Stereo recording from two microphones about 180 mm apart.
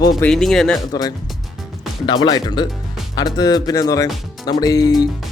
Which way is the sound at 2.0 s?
25° left (ahead or behind).